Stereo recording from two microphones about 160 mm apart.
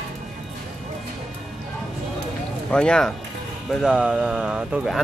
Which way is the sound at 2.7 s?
5° left (ahead or behind).